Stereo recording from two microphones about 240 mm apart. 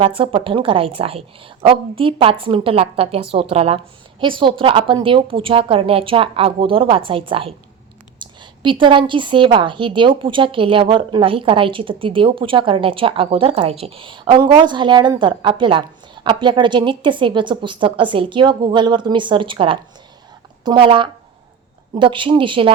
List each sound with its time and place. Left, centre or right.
0.0 s a woman's voice: right